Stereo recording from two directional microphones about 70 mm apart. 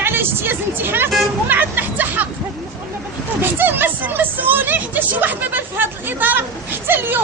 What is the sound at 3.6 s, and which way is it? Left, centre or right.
Speech, right.